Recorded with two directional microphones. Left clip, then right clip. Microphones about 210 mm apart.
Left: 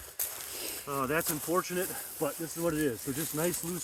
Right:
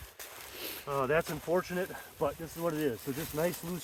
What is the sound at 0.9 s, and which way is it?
Speech, 35° right (ahead or behind).